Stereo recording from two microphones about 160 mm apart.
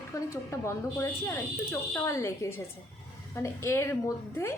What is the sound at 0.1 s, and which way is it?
A woman's voice, 20° left (ahead or behind).